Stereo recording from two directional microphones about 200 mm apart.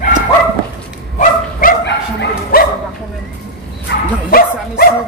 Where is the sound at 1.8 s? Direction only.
55° left (ahead or behind).